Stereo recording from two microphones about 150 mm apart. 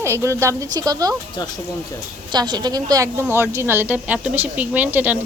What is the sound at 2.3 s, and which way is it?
A woman's voice, 30° right (ahead or behind).